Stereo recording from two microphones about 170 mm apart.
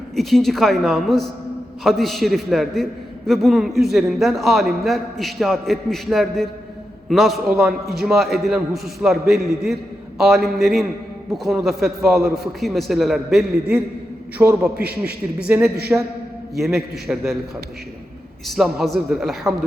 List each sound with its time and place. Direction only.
0.2 s a man's voice: centre (ahead or behind)
14.8 s a man's voice: 65° right (ahead or behind)
15.4 s a man's voice: 10° right (ahead or behind)
18.4 s a man's voice: centre (ahead or behind)